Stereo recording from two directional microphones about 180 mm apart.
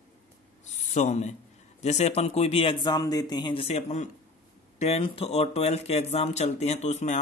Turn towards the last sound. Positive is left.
turn(degrees=40)  # may be behind; listen again after turning